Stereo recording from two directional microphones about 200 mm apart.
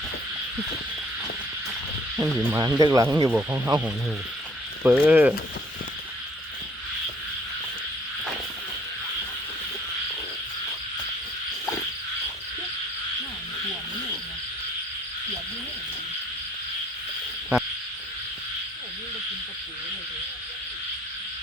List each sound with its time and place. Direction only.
2.1 s speech: 10° right (ahead or behind)